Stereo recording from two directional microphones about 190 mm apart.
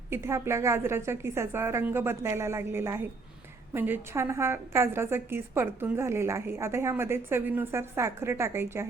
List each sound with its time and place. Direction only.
0.1 s a woman's voice: 15° right (ahead or behind)